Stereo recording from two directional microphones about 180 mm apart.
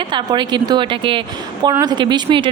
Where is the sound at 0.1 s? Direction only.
25° right (ahead or behind).